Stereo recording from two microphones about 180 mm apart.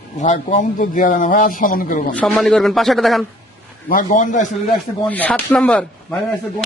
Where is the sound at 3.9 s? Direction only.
45° left (ahead or behind).